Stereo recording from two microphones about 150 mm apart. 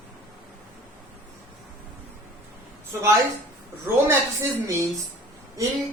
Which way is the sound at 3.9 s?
15° right (ahead or behind).